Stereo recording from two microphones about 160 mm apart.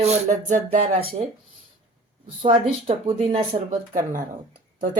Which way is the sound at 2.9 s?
35° right (ahead or behind).